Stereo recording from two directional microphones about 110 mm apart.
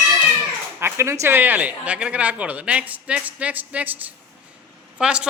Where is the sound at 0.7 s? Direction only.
25° right (ahead or behind).